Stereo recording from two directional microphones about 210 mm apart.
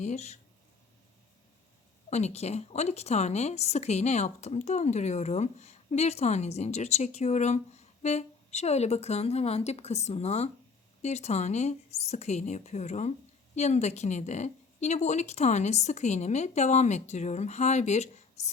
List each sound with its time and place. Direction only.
0.0 s a woman's voice: 30° left (ahead or behind)
2.0 s a woman's voice: 30° left (ahead or behind)